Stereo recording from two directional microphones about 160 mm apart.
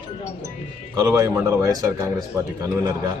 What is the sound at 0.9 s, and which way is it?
A man's voice, 20° right (ahead or behind).